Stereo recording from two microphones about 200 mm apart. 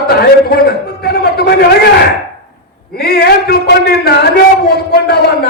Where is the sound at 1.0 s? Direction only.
55° left (ahead or behind).